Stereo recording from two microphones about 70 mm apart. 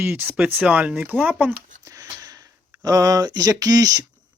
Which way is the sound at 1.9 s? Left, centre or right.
Right.